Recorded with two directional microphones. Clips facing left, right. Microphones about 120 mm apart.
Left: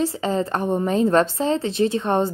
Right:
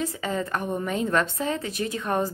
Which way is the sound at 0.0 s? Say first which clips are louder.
Left 6 dB; 30° left (ahead or behind).